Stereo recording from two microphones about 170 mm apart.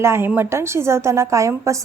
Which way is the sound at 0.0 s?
15° right (ahead or behind).